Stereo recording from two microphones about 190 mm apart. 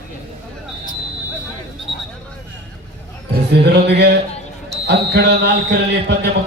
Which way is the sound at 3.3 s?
60° right (ahead or behind).